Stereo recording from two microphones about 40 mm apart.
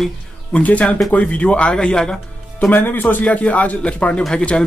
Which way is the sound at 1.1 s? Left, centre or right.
Left.